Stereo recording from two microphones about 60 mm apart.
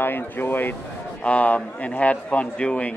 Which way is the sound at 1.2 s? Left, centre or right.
Left.